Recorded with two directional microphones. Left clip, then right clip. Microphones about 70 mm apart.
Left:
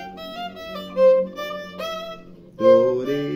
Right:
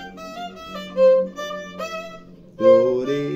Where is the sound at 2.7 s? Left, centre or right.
Centre.